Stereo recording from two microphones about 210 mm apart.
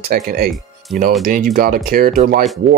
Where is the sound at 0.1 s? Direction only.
40° right (ahead or behind).